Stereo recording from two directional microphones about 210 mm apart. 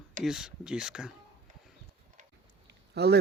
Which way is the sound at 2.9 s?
50° right (ahead or behind).